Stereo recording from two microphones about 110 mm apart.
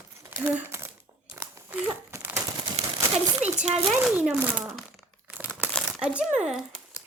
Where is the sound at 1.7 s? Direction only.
15° right (ahead or behind).